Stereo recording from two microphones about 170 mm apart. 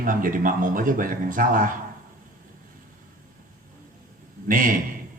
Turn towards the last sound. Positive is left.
turn(degrees=-55)  # may be behind; listen again after turning